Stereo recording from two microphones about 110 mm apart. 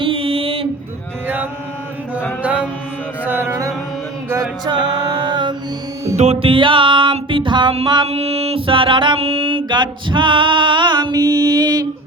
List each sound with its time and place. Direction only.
0.0 s music: 55° right (ahead or behind)
2.4 s mantra: 15° right (ahead or behind)
3.2 s music: 20° right (ahead or behind)
4.4 s music: 40° right (ahead or behind)
6.4 s mantra: 50° right (ahead or behind)
8.0 s mantra: 70° right (ahead or behind); by 11.9 s 35° right (ahead or behind)